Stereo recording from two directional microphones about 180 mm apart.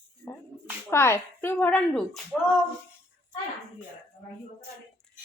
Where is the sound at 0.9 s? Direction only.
15° left (ahead or behind).